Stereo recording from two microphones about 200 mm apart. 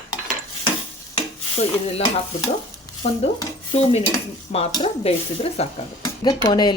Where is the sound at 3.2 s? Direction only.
30° left (ahead or behind).